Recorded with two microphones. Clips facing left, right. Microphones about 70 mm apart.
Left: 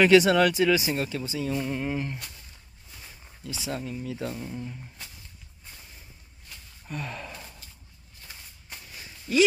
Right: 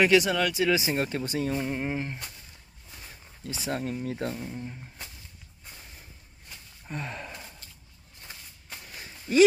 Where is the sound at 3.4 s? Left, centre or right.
Right.